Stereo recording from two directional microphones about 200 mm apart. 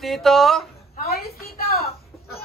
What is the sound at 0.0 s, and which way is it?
Speech, centre (ahead or behind).